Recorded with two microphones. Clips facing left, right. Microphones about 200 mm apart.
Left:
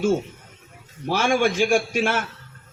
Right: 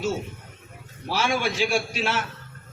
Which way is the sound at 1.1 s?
50° left (ahead or behind).